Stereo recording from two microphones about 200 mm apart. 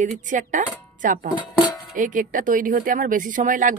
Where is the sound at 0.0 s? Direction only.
40° right (ahead or behind).